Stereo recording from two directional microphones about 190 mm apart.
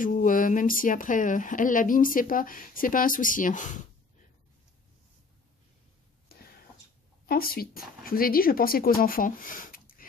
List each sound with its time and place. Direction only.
0.0 s speech: 45° left (ahead or behind)
6.3 s a sound: 55° left (ahead or behind)
7.2 s speech: 50° left (ahead or behind)